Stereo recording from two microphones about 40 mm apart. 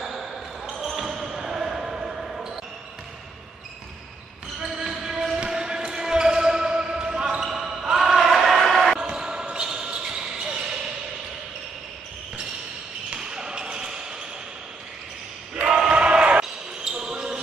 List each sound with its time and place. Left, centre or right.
0.0 s basketball bounce: centre
4.6 s basketball bounce: centre
9.0 s basketball bounce: centre
13.1 s basketball bounce: centre
15.5 s choir: right
15.9 s basketball bounce: right
16.8 s basketball bounce: centre